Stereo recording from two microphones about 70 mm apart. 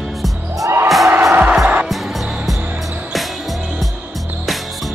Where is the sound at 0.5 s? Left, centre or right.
Right.